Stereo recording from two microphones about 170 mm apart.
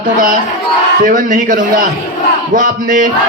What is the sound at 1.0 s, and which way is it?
A man's voice, 50° right (ahead or behind).